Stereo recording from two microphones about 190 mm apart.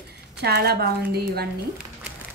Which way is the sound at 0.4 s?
60° right (ahead or behind).